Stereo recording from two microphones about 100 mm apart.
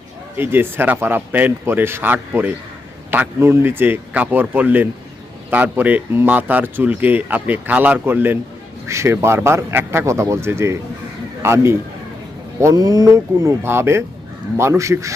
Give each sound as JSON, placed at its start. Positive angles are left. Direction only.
{"t": 0.3, "sound": "a man's voice", "side_deg": -20}